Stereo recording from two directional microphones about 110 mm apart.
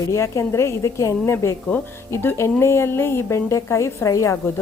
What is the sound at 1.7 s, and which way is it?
Speech, 15° left (ahead or behind).